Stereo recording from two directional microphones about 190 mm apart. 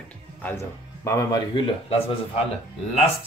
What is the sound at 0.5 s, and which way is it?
Speech, 15° left (ahead or behind).